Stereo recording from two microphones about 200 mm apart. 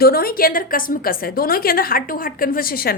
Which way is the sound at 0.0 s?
50° left (ahead or behind).